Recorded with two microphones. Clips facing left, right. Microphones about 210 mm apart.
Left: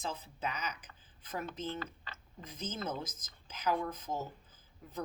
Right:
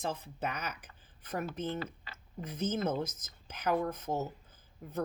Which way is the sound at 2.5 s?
60° right (ahead or behind).